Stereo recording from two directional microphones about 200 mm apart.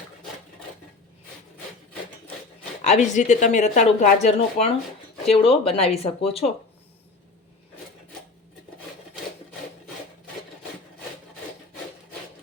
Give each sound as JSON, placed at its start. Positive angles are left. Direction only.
{"t": 2.8, "sound": "speech", "side_deg": 35}